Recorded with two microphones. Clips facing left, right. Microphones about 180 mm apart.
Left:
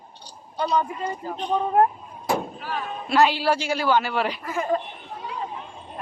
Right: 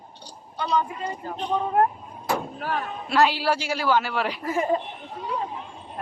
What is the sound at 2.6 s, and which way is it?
Speech, 50° right (ahead or behind).